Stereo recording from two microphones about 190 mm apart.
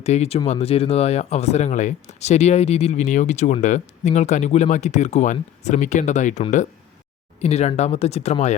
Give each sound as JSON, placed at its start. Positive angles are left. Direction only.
{"t": 0.0, "sound": "speech", "side_deg": 35}